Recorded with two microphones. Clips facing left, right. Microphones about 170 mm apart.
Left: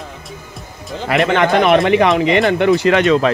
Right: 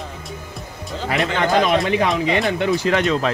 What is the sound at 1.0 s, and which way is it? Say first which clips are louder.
Speech: left 6 dB; 70° left (ahead or behind).